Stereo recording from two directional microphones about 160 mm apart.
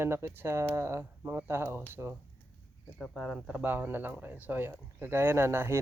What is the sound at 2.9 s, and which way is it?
Speech, 5° left (ahead or behind).